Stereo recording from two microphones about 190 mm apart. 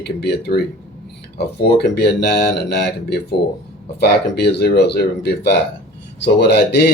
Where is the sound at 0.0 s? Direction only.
60° left (ahead or behind).